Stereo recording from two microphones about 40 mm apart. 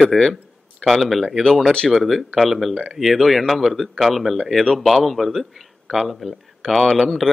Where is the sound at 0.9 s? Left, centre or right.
Centre.